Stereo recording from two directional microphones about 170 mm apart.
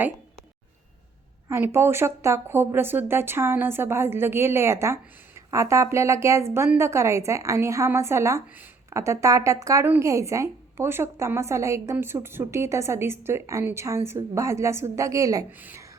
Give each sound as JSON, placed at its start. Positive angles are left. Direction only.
{"t": 1.5, "sound": "speech", "side_deg": -15}